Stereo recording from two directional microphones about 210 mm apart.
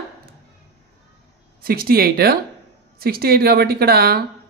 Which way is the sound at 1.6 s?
45° right (ahead or behind).